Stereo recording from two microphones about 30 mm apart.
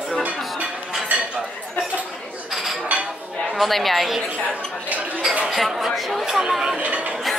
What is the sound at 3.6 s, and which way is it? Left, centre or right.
Speech, centre.